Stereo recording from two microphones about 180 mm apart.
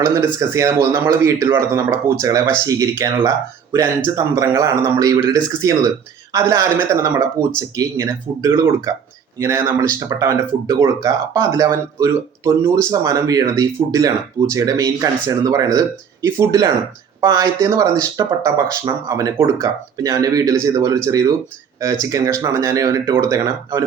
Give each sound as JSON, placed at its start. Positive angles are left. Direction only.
{"t": 0.0, "sound": "speech", "side_deg": -15}